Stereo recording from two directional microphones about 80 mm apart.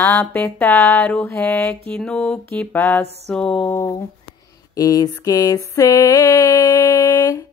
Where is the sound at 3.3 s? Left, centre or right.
Centre.